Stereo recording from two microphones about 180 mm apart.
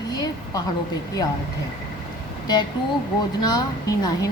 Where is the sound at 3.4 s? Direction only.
20° left (ahead or behind).